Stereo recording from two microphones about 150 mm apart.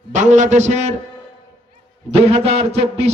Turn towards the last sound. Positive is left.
turn(degrees=-45)  # may be behind; listen again after turning